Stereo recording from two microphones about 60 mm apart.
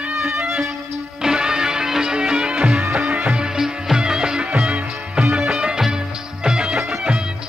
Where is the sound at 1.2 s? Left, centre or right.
Centre.